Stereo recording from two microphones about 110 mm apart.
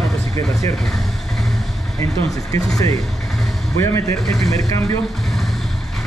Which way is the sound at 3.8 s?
30° left (ahead or behind).